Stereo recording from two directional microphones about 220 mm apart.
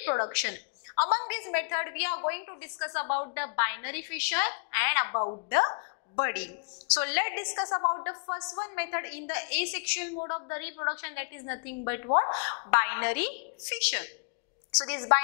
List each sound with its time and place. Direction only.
0.3 s a woman's voice: 10° left (ahead or behind)
5.1 s a woman's voice: 25° left (ahead or behind)
5.5 s a woman's voice: 15° left (ahead or behind)